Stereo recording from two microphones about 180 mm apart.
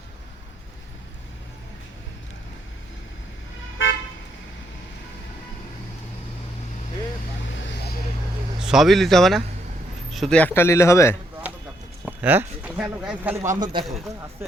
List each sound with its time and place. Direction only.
8.6 s speech: centre (ahead or behind); by 11.2 s 15° left (ahead or behind)
12.0 s speech: 10° right (ahead or behind)
13.4 s speech: 20° right (ahead or behind)